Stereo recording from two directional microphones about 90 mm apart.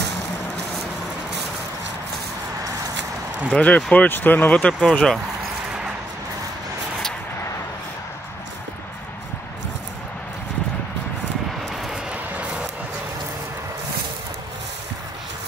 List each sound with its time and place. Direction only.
3.4 s speech: 15° left (ahead or behind)
11.7 s vehicle: centre (ahead or behind)